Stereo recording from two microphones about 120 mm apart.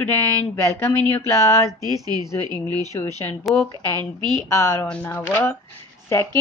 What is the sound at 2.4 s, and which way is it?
Speech, 35° right (ahead or behind).